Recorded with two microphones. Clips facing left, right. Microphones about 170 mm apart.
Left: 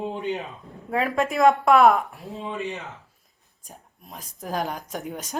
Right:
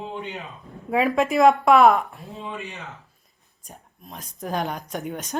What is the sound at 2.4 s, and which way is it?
Speech, 20° left (ahead or behind).